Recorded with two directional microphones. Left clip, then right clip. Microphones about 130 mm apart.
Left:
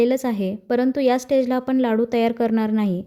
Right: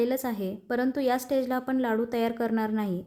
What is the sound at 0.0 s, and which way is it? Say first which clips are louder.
A woman's voice: left 8 dB; 25° left (ahead or behind).